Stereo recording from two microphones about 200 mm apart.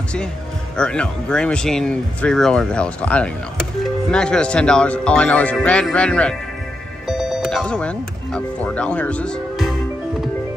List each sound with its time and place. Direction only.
0.7 s speech: 5° left (ahead or behind)